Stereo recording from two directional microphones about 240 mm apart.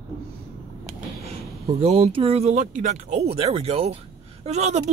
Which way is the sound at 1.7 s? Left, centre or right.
Right.